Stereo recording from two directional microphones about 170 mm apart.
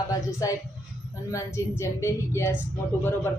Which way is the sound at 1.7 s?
15° left (ahead or behind).